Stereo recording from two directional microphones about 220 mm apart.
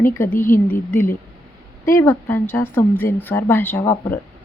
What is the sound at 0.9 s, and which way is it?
Speech, 10° left (ahead or behind).